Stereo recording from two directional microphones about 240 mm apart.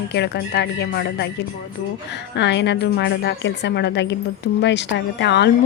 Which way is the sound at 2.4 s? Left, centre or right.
Left.